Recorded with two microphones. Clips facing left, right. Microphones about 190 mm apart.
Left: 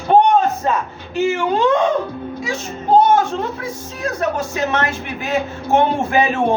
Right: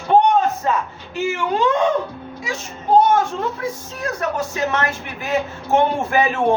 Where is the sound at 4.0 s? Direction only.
25° left (ahead or behind).